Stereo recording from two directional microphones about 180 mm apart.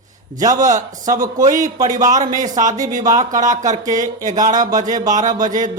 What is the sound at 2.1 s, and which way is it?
Speech, 45° right (ahead or behind).